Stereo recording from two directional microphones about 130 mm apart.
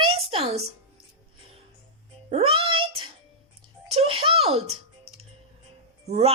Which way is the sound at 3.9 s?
45° right (ahead or behind).